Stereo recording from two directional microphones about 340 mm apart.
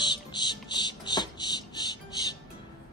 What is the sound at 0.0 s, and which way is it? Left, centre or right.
Music, centre.